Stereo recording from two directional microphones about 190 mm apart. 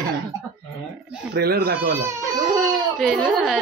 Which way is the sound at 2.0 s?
15° right (ahead or behind).